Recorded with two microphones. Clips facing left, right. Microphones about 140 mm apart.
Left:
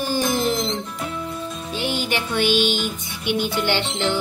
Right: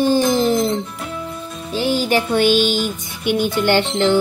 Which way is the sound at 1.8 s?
40° right (ahead or behind).